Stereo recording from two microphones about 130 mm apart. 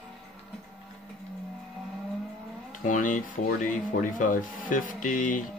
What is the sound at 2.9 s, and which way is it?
Speech, 85° left.